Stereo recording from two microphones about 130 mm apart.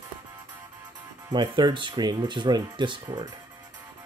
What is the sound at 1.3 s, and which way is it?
Speech, 35° right (ahead or behind).